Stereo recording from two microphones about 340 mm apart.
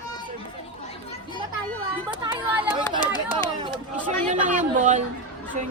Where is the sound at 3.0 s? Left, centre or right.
Centre.